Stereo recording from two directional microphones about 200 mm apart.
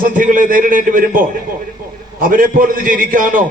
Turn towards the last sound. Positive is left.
turn(degrees=-40)  # may be behind; listen again after turning